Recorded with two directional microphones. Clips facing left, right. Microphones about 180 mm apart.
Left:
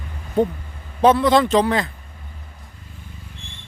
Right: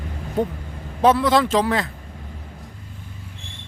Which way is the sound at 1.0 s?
Centre (ahead or behind).